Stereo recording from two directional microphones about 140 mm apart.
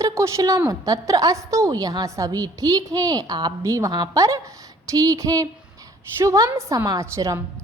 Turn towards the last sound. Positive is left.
turn(degrees=-20)  # may be behind; listen again after turning